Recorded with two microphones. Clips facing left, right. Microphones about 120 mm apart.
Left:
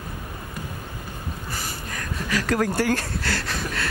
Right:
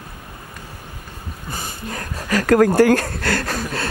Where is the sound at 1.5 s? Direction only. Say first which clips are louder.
Right 7 dB; 35° right (ahead or behind).